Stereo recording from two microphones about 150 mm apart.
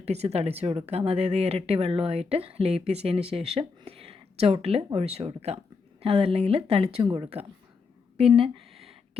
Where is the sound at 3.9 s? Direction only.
40° right (ahead or behind).